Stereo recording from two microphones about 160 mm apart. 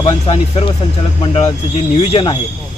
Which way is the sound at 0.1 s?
30° left (ahead or behind).